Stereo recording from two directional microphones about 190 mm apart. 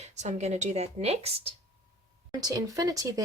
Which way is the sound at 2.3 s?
20° right (ahead or behind).